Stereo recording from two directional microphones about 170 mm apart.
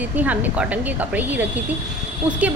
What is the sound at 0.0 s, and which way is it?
A woman's voice, 10° right (ahead or behind).